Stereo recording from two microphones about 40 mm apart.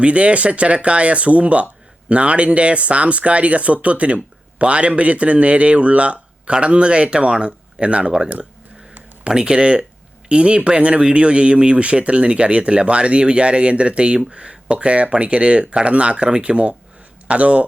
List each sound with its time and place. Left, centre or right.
0.0 s speech: right